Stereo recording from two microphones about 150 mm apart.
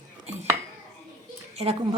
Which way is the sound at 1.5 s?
40° right (ahead or behind).